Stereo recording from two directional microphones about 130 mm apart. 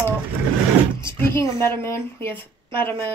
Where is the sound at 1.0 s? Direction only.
20° left (ahead or behind).